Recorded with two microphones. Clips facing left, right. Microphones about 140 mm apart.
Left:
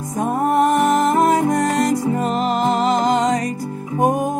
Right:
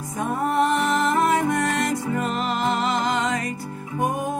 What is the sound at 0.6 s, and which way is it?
Music, 45° left (ahead or behind).